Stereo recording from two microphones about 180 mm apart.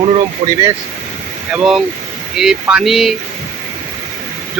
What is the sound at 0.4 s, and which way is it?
Speech, 35° right (ahead or behind).